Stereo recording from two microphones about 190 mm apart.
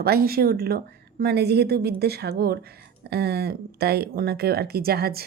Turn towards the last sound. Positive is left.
turn(degrees=-55)  # may be behind; listen again after turning